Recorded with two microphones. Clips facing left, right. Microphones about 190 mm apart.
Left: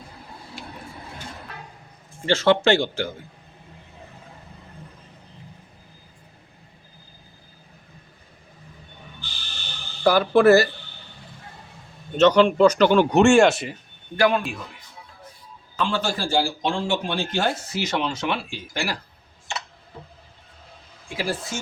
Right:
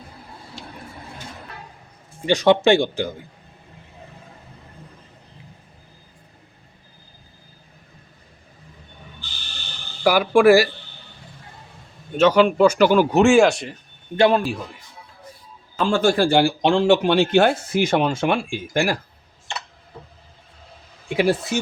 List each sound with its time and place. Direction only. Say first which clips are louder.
2.2 s speech: right 3 dB; 15° right (ahead or behind)
10.0 s speech: right 1 dB; 10° right (ahead or behind)
12.1 s speech: even; 10° right (ahead or behind)
14.2 s a man's voice: right 4 dB; 35° right (ahead or behind)
15.8 s speech: right 7 dB; 50° right (ahead or behind)
21.2 s speech: right 8 dB; 65° right (ahead or behind)